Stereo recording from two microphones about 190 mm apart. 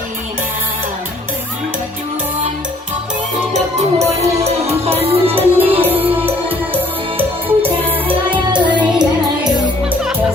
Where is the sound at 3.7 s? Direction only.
35° right (ahead or behind).